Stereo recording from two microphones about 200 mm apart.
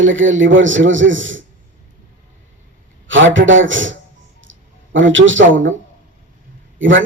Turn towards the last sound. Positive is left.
turn(degrees=-70)  # may be behind; listen again after turning